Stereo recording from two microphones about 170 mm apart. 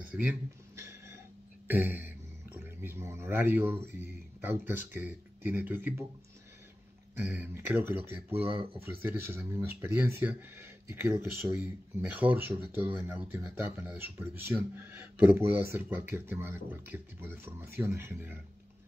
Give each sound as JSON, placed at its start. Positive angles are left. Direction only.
{"t": 0.1, "sound": "a sound", "side_deg": -10}
{"t": 1.7, "sound": "speech", "side_deg": -10}
{"t": 7.2, "sound": "speech", "side_deg": -10}